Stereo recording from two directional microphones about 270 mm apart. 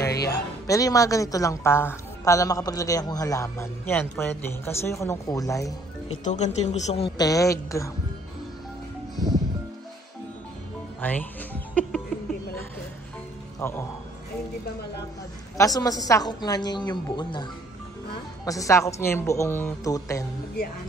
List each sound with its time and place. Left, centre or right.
0.1 s music: left
0.7 s a woman's voice: centre
6.2 s a woman's voice: left
11.0 s speech: centre
13.6 s speech: centre
15.5 s a woman's voice: centre